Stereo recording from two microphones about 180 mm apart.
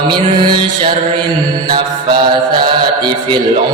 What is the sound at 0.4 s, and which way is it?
Mantra, 30° right (ahead or behind).